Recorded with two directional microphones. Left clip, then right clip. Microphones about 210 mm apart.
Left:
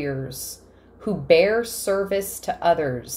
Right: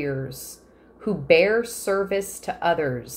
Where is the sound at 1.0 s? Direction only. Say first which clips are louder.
Left 1 dB; 5° left (ahead or behind).